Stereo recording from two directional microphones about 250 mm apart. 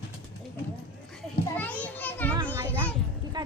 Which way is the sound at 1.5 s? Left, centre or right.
Centre.